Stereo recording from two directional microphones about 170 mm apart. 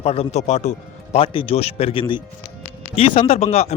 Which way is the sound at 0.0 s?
35° left (ahead or behind).